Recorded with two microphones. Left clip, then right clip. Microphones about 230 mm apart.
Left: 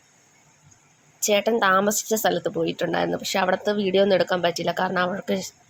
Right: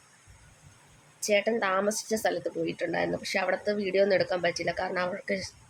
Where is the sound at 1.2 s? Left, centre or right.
Centre.